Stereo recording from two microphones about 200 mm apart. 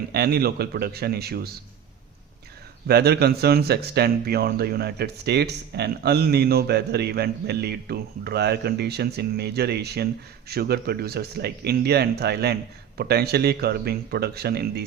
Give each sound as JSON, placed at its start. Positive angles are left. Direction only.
{"t": 0.1, "sound": "speech", "side_deg": -50}
{"t": 2.8, "sound": "speech", "side_deg": -55}